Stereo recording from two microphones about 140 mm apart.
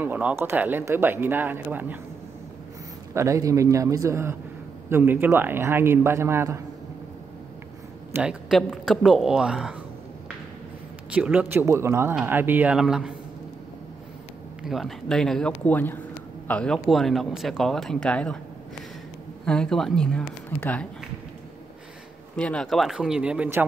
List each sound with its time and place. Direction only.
0.0 s speech: 10° right (ahead or behind)
3.2 s a man's voice: 20° right (ahead or behind)
8.1 s speech: 5° right (ahead or behind)
11.1 s speech: 10° right (ahead or behind)
14.6 s speech: centre (ahead or behind)
19.4 s speech: 5° left (ahead or behind)
22.4 s speech: 5° left (ahead or behind); by 23.6 s 10° right (ahead or behind)